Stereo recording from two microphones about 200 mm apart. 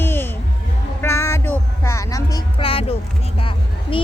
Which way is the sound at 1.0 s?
15° left (ahead or behind).